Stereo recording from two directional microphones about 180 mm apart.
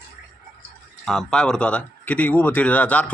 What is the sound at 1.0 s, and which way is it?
Speech, 5° left (ahead or behind).